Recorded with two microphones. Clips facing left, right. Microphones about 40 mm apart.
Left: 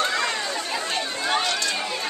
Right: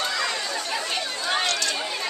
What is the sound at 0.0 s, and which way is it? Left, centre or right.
Chatter, left.